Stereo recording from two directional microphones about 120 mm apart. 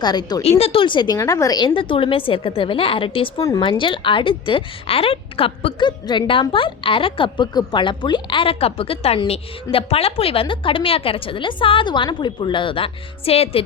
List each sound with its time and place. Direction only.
0.0 s speech: 35° left (ahead or behind)
0.6 s a woman's voice: 50° left (ahead or behind)